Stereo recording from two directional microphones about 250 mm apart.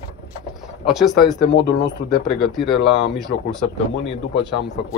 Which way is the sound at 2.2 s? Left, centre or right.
Centre.